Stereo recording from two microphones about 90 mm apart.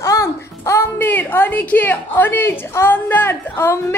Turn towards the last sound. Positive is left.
turn(degrees=25)  # may be behind; listen again after turning